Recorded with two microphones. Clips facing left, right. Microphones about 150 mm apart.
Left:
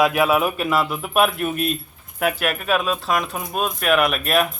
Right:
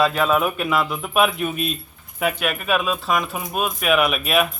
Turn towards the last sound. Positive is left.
turn(degrees=0)  # may be behind; listen again after turning